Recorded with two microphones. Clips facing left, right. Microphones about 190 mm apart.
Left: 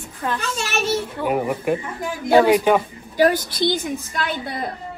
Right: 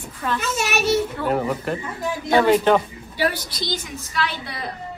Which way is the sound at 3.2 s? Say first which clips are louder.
Left 7 dB; 50° left (ahead or behind).